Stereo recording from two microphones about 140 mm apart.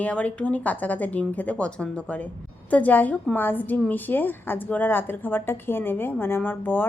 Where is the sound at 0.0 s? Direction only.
10° left (ahead or behind).